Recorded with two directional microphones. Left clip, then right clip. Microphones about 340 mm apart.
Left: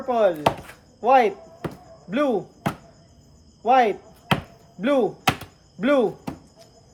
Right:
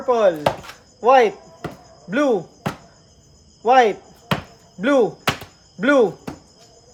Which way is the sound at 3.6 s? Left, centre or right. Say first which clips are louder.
Right 4 dB; right.